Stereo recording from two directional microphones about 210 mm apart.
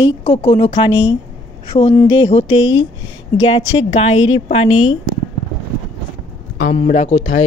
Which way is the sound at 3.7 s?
25° left (ahead or behind).